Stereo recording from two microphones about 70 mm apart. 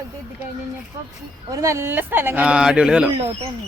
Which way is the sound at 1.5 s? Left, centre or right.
Right.